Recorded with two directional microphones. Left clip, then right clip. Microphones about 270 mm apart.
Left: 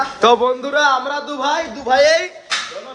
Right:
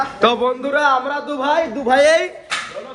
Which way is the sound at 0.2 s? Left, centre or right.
Centre.